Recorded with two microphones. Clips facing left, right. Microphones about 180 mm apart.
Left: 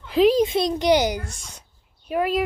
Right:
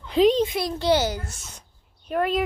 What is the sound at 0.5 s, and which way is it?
A child's voice, 20° left (ahead or behind).